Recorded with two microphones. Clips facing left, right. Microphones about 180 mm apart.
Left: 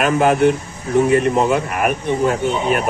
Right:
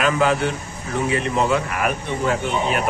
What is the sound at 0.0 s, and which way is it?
Speech, 50° left (ahead or behind).